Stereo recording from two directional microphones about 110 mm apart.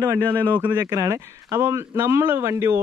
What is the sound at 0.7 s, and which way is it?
Speech, 35° right (ahead or behind).